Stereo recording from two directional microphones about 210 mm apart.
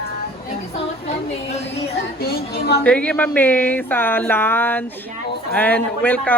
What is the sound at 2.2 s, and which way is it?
Speech, 50° left (ahead or behind).